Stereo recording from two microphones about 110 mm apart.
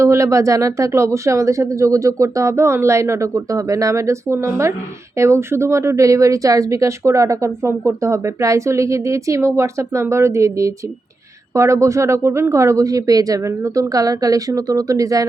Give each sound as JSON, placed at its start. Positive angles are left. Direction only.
{"t": 0.0, "sound": "speech", "side_deg": -25}